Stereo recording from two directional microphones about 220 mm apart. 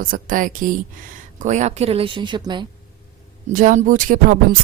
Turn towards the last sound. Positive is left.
turn(degrees=-40)  # may be behind; listen again after turning